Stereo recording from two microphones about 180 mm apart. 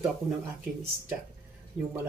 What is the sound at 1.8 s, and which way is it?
Speech, 5° right (ahead or behind).